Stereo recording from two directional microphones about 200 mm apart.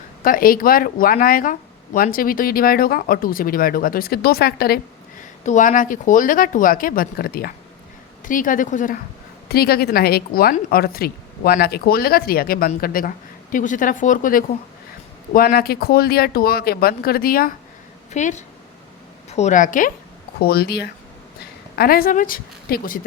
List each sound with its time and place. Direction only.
0.2 s a woman's voice: 45° left (ahead or behind)
5.5 s a woman's voice: 40° left (ahead or behind)
9.5 s a woman's voice: 50° left (ahead or behind)
18.1 s a woman's voice: 35° left (ahead or behind)
20.4 s a woman's voice: 50° left (ahead or behind)